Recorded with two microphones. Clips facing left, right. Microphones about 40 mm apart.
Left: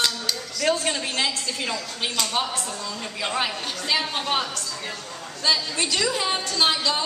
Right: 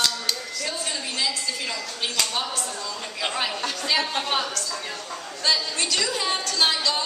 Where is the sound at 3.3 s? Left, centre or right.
Centre.